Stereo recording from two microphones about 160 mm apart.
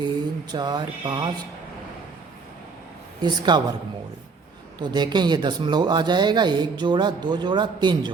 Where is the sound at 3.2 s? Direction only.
25° right (ahead or behind).